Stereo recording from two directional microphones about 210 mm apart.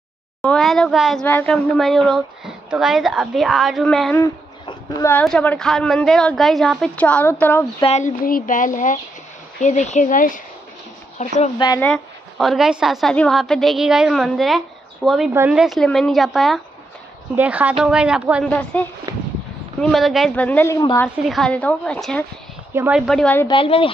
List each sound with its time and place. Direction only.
0.4 s speech: centre (ahead or behind)
4.2 s a sound: 15° left (ahead or behind)
5.2 s speech: 5° left (ahead or behind)
7.8 s speech: 30° left (ahead or behind)
8.2 s speech: 40° left (ahead or behind)
11.5 s a woman's voice: 20° left (ahead or behind)
11.9 s speech: centre (ahead or behind)
18.6 s a woman's voice: 5° left (ahead or behind)
19.1 s a sound: 15° right (ahead or behind)
19.8 s a woman's voice: centre (ahead or behind)
21.3 s speech: 5° left (ahead or behind)
23.4 s a woman's voice: 25° left (ahead or behind)